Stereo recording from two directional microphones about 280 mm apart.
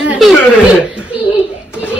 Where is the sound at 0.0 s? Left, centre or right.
Centre.